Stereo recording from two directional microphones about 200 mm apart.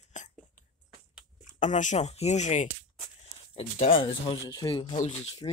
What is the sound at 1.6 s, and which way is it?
Speech, 35° left (ahead or behind).